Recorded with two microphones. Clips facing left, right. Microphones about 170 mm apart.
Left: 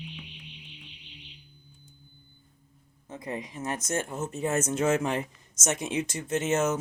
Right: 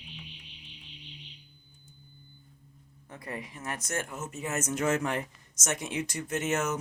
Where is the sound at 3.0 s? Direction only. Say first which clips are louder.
Left 4 dB; 20° left (ahead or behind).